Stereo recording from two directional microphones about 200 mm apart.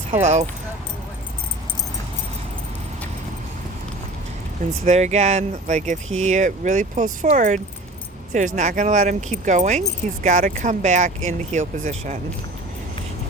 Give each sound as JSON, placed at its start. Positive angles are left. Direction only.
{"t": 0.1, "sound": "speech", "side_deg": -35}
{"t": 4.9, "sound": "speech", "side_deg": -35}